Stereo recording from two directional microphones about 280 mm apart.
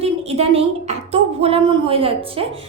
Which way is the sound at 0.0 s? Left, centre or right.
Right.